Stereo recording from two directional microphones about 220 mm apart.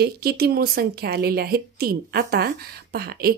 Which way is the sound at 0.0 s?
45° right (ahead or behind).